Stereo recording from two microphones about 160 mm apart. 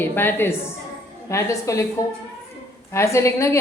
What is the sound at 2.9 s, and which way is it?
Speech, 15° left (ahead or behind).